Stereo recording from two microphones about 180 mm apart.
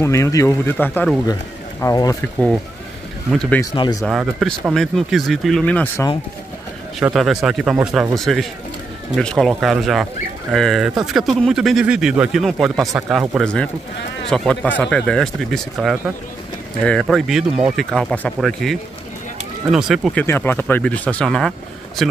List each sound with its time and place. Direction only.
0.0 s speech: 15° left (ahead or behind)
1.2 s speech: 20° left (ahead or behind)
3.3 s speech: 5° left (ahead or behind)
3.7 s speech: 25° left (ahead or behind)
4.0 s speech: 5° right (ahead or behind)
7.0 s speech: centre (ahead or behind)
20.2 s speech: 10° left (ahead or behind)